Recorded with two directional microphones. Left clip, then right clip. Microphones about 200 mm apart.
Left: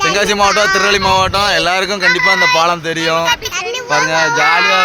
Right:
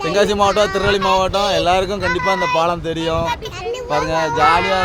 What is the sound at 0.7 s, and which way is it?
Speech, 35° left (ahead or behind).